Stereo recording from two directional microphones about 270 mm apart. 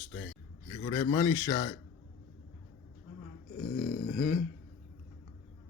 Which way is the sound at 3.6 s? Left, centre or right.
Left.